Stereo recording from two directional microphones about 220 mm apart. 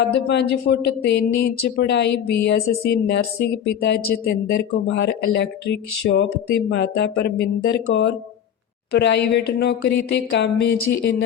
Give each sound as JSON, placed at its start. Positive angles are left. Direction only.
{"t": 0.0, "sound": "speech", "side_deg": 50}
{"t": 7.9, "sound": "speech", "side_deg": 60}
{"t": 8.9, "sound": "speech", "side_deg": 50}